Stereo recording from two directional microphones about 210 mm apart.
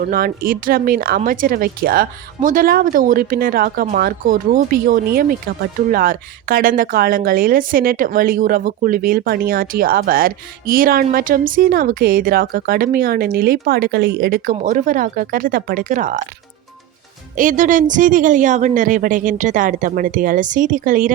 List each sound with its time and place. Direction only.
0.0 s speech: 45° right (ahead or behind)
17.3 s speech: 40° right (ahead or behind)